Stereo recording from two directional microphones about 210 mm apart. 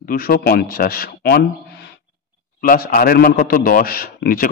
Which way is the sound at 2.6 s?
45° left (ahead or behind).